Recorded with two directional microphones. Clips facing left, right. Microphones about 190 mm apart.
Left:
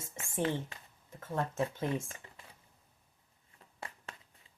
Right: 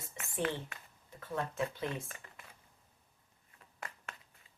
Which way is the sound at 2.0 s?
25° left (ahead or behind).